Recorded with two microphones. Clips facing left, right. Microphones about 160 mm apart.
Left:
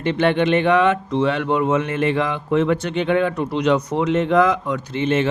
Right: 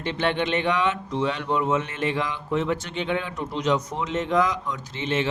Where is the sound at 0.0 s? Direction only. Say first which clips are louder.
Left 7 dB; 55° left (ahead or behind).